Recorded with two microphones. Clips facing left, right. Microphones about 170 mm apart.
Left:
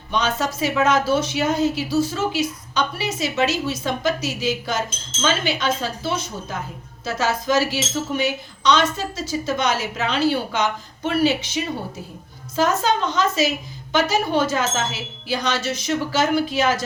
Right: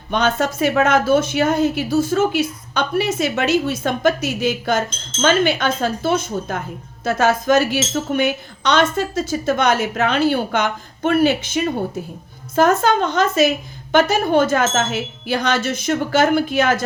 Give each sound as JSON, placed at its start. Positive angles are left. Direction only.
{"t": 0.1, "sound": "speech", "side_deg": -55}